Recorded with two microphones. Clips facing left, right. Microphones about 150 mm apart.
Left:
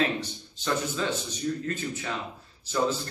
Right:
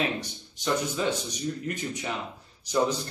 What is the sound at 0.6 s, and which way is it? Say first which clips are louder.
Speech: right 1 dB; 15° right (ahead or behind).